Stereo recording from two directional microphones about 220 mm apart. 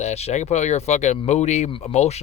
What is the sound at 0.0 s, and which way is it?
Speech, 30° left (ahead or behind).